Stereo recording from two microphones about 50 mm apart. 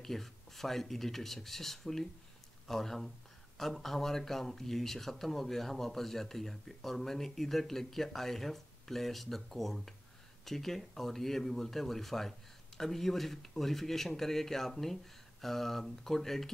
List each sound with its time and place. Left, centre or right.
0.0 s speech: centre